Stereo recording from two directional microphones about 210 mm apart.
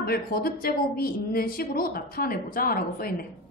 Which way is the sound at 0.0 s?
45° left (ahead or behind).